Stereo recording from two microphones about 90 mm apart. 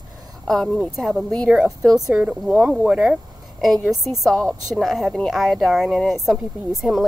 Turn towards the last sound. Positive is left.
turn(degrees=-20)  # may be behind; listen again after turning